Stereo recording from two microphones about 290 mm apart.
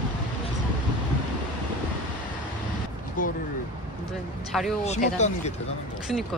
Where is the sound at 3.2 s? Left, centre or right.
Left.